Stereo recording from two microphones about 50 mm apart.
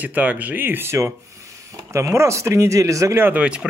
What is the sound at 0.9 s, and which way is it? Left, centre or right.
Speech, right.